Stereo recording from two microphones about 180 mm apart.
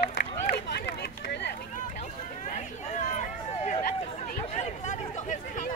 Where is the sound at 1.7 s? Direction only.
45° left (ahead or behind).